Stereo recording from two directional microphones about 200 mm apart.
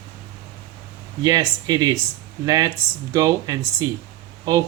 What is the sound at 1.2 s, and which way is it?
Speech, 20° right (ahead or behind).